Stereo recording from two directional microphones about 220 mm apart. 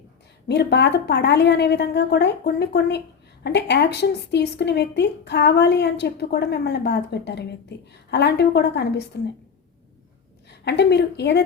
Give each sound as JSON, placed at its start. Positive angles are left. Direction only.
{"t": 0.4, "sound": "a woman's voice", "side_deg": 50}
{"t": 10.5, "sound": "a woman's voice", "side_deg": 50}